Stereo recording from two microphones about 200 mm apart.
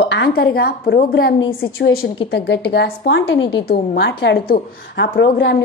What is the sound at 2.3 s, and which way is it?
A woman's voice, 60° left (ahead or behind).